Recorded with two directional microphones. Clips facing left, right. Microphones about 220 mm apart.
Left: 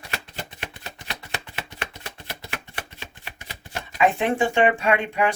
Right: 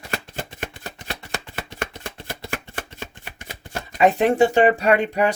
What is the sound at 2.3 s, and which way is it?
Speech, 50° right (ahead or behind).